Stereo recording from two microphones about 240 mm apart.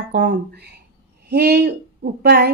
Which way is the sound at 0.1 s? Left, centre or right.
Right.